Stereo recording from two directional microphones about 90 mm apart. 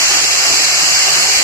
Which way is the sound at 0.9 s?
35° left (ahead or behind).